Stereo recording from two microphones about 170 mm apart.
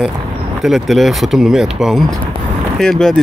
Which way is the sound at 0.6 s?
Centre (ahead or behind).